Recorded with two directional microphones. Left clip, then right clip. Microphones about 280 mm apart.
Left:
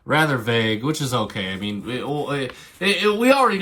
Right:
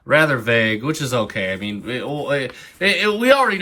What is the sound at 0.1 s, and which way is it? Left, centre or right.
Speech, centre.